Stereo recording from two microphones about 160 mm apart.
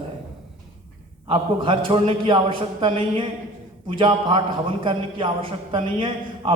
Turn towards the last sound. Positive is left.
turn(degrees=-35)  # may be behind; listen again after turning